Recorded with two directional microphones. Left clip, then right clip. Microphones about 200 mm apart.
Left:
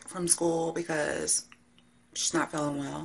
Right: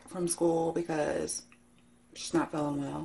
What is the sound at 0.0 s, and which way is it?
Speech, centre (ahead or behind).